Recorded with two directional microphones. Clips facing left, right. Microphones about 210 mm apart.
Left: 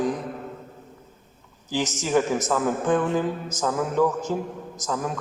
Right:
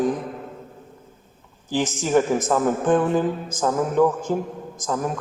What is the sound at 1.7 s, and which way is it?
A man's voice, 55° right (ahead or behind).